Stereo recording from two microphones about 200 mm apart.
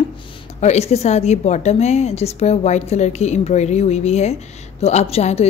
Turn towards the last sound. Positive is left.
turn(degrees=30)  # may be behind; listen again after turning